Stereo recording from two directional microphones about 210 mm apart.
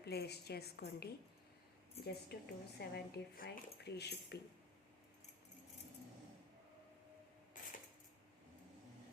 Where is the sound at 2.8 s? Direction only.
50° left (ahead or behind).